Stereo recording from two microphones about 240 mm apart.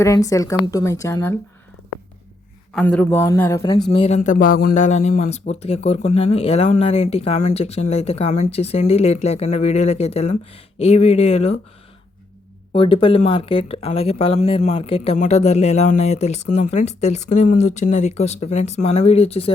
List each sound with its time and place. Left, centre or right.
0.0 s a woman's voice: centre
2.7 s a woman's voice: centre
3.6 s speech: left
12.7 s speech: left